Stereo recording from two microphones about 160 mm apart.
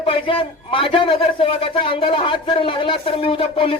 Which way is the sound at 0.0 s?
35° left (ahead or behind).